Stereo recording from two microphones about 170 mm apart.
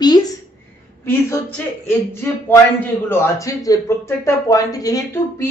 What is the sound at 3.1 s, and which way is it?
Speech, 20° left (ahead or behind).